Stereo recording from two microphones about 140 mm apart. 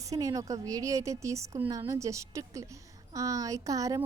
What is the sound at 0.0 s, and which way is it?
A woman's voice, 25° right (ahead or behind).